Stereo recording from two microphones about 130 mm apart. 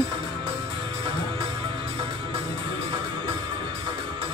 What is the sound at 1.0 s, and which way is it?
Music, 40° right (ahead or behind).